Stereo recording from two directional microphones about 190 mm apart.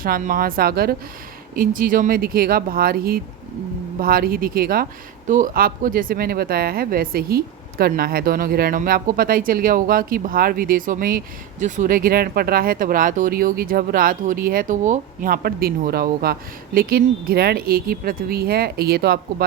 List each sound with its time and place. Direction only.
0.0 s speech: 50° right (ahead or behind)